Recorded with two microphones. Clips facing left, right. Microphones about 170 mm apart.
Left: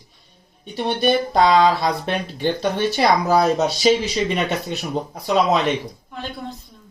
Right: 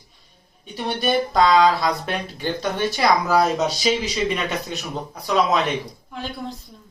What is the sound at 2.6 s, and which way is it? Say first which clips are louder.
Speech: left 1 dB; 35° left (ahead or behind).